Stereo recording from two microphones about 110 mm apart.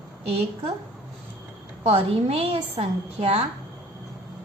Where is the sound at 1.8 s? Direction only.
65° right (ahead or behind).